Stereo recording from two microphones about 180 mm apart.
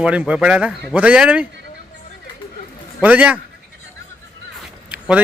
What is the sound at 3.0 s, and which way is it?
Speech, 5° right (ahead or behind).